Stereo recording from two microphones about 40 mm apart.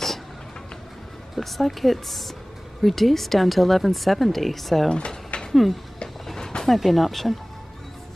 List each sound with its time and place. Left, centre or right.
1.3 s speech: centre
4.9 s a sound: left
5.5 s speech: centre
6.2 s vehicle: centre
6.8 s speech: centre